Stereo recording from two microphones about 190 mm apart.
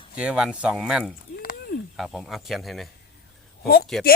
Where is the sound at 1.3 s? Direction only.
50° left (ahead or behind).